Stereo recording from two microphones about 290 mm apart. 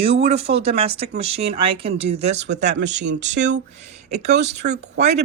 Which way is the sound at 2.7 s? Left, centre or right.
Right.